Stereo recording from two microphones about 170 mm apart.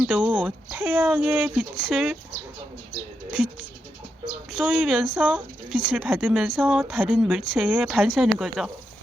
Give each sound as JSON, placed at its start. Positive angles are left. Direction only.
{"t": 0.0, "sound": "speech", "side_deg": -5}
{"t": 3.3, "sound": "speech", "side_deg": 0}